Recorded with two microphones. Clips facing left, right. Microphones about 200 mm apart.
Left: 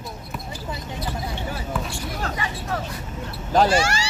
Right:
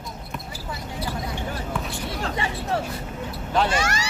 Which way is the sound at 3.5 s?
30° left (ahead or behind).